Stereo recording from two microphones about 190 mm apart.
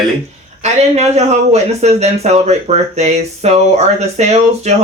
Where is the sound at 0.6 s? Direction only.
35° right (ahead or behind).